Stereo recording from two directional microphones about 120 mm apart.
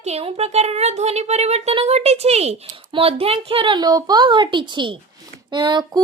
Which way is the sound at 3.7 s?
35° right (ahead or behind).